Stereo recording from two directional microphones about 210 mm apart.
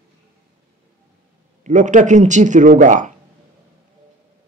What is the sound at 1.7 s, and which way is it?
Speech, 35° right (ahead or behind).